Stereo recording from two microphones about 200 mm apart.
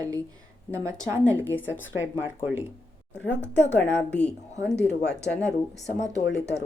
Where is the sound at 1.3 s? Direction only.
10° left (ahead or behind).